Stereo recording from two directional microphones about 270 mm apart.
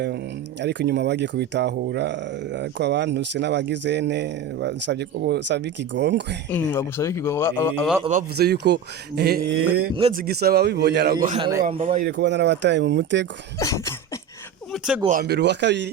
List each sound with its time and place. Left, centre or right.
0.6 s speech: right
6.5 s speech: centre
8.4 s speech: right
11.3 s speech: centre
12.2 s speech: right
13.6 s cough: centre
14.7 s a sound: centre
15.0 s speech: right